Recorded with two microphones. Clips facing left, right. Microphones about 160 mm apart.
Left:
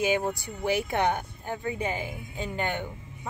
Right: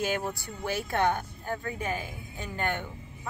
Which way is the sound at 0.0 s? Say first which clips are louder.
Left 4 dB; 15° left (ahead or behind).